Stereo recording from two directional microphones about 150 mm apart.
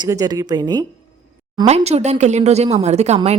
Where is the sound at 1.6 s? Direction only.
45° right (ahead or behind).